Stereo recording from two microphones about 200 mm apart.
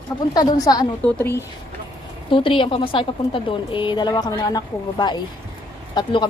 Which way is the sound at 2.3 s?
25° left (ahead or behind).